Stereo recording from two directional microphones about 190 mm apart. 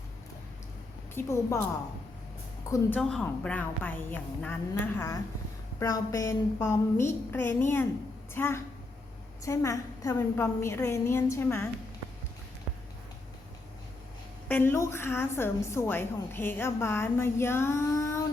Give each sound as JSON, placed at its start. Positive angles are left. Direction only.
{"t": 1.1, "sound": "a woman's voice", "side_deg": 15}
{"t": 2.6, "sound": "a woman's voice", "side_deg": 15}
{"t": 3.0, "sound": "a woman's voice", "side_deg": 0}
{"t": 14.4, "sound": "a woman's voice", "side_deg": 10}